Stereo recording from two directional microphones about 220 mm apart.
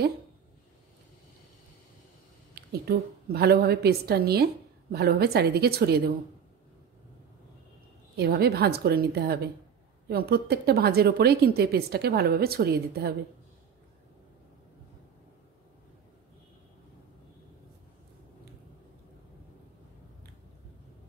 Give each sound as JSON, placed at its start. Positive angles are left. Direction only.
{"t": 2.5, "sound": "a woman's voice", "side_deg": -45}
{"t": 8.2, "sound": "a woman's voice", "side_deg": -45}